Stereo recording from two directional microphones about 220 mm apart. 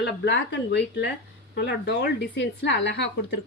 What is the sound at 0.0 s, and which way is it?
Speech, 55° left (ahead or behind).